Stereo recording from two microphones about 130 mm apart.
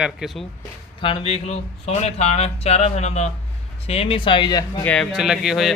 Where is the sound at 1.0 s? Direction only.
45° left (ahead or behind).